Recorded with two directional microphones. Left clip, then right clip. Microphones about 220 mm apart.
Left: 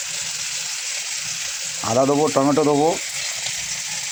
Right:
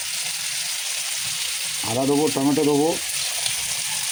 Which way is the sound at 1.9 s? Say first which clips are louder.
Left 4 dB; 20° left (ahead or behind).